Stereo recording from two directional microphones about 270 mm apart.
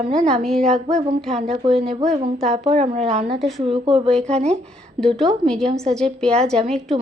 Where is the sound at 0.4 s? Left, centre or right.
Centre.